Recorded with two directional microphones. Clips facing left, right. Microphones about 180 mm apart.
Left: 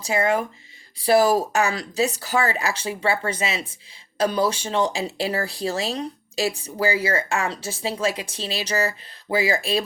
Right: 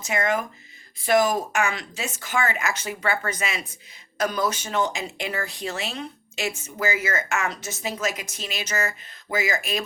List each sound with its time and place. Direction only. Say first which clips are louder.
0.0 s speech: left 3 dB; 30° left (ahead or behind)